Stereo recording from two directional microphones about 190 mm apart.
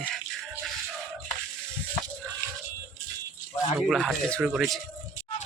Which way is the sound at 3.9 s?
Centre (ahead or behind).